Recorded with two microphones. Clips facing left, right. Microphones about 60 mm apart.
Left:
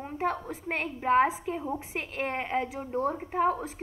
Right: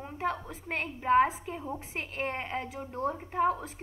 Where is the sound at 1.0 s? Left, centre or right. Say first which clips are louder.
Even; left.